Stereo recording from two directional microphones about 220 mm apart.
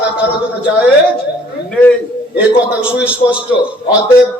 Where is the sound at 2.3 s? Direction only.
5° right (ahead or behind).